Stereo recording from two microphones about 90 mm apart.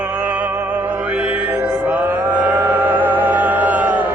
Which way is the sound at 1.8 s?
20° right (ahead or behind).